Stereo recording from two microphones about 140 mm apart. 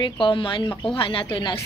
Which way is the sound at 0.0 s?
35° left (ahead or behind).